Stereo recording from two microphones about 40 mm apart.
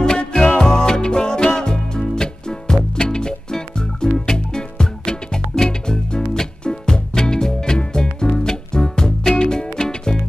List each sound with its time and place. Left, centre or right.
0.0 s music: centre